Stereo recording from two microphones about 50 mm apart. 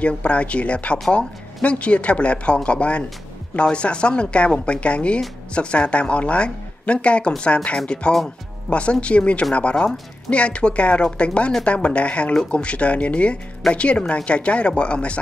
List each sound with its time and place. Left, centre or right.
0.0 s speech: left